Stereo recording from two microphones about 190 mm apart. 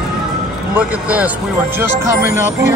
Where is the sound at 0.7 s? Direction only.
5° right (ahead or behind).